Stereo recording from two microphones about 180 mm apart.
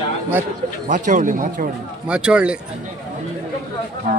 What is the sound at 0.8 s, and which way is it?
Speech, 45° right (ahead or behind).